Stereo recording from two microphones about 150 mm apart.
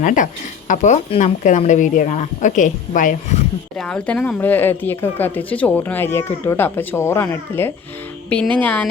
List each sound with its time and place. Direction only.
0.0 s a woman's voice: 60° left (ahead or behind)
3.8 s speech: 5° left (ahead or behind)